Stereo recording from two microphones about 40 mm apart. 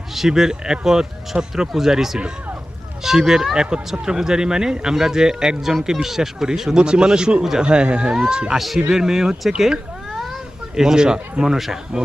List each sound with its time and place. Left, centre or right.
0.1 s speech: centre
8.5 s speech: centre
10.1 s cat: centre
11.4 s speech: centre